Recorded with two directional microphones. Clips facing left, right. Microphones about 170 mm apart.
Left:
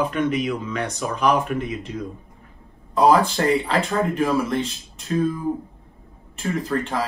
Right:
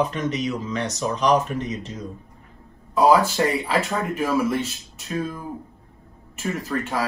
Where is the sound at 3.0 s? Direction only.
5° right (ahead or behind).